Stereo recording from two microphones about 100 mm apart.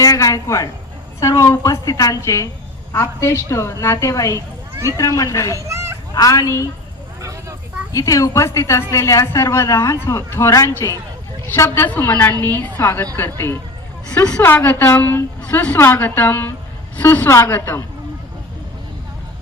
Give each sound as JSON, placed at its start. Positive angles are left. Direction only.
{"t": 0.0, "sound": "a woman's voice", "side_deg": 35}
{"t": 5.5, "sound": "a sound", "side_deg": -30}
{"t": 6.1, "sound": "a woman's voice", "side_deg": 35}
{"t": 7.2, "sound": "vehicle", "side_deg": -35}
{"t": 7.9, "sound": "a woman's voice", "side_deg": 35}
{"t": 14.2, "sound": "a woman's voice", "side_deg": 10}